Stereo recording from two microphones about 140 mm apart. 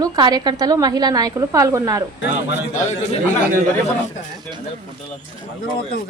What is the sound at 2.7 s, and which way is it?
Speech, 60° left (ahead or behind).